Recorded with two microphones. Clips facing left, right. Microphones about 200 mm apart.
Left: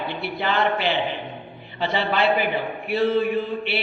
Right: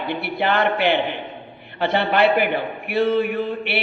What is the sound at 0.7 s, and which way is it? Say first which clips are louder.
Speech: right 4 dB; 60° right (ahead or behind).